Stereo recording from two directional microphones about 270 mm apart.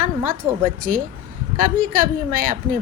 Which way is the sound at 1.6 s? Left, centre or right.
Right.